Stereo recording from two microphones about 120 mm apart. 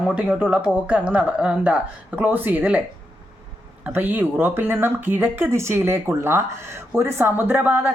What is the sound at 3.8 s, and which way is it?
Speech, 15° right (ahead or behind).